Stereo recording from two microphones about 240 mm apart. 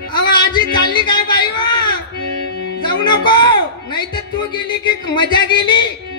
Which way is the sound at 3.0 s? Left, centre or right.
Centre.